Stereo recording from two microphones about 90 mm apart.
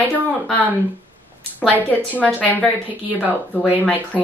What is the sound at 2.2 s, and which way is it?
Speech, 15° left (ahead or behind).